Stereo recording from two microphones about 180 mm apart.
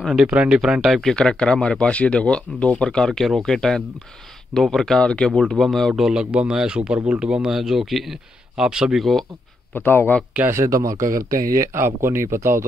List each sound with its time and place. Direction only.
0.0 s speech: centre (ahead or behind)
9.8 s a man's voice: 10° left (ahead or behind)
10.3 s speech: 15° right (ahead or behind)
11.2 s speech: 50° right (ahead or behind)
11.7 s speech: 15° right (ahead or behind)